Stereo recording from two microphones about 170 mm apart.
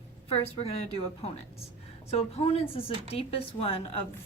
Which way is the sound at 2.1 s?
35° left (ahead or behind).